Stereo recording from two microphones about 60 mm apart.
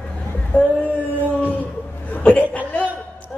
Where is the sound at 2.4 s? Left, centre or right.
Left.